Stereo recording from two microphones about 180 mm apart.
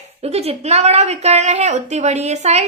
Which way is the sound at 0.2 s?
35° right (ahead or behind).